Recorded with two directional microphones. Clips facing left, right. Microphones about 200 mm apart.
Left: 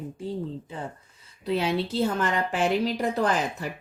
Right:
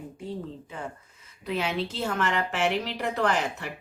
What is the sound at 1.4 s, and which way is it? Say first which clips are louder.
A woman's voice: left 3 dB; 35° left (ahead or behind).